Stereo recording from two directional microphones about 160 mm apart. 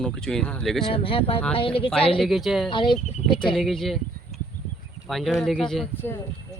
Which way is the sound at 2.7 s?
30° left (ahead or behind).